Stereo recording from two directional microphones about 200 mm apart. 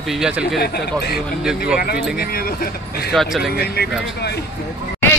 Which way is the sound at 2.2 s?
50° left (ahead or behind).